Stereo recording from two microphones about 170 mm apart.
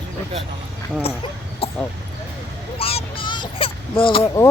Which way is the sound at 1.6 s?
35° left (ahead or behind).